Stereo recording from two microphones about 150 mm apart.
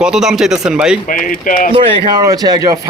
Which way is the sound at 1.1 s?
65° left (ahead or behind).